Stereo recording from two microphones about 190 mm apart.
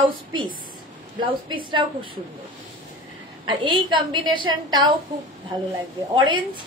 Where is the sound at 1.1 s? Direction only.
25° right (ahead or behind).